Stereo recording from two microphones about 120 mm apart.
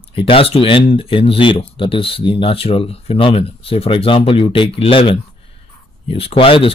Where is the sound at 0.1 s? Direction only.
50° left (ahead or behind).